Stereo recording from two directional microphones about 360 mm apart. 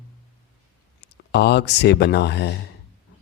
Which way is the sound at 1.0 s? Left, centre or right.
Left.